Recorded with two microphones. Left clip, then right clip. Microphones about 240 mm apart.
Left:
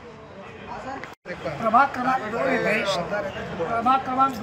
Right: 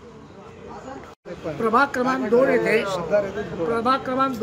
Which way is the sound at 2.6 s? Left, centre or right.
Centre.